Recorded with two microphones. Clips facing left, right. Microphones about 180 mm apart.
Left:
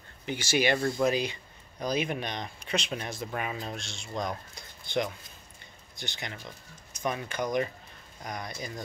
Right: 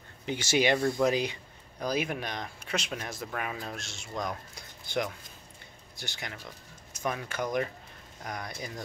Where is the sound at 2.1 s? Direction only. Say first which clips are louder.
Left 1 dB; 5° right (ahead or behind).